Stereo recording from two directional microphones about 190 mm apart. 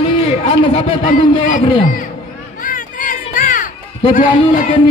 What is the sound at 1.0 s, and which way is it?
Speech, 45° left (ahead or behind).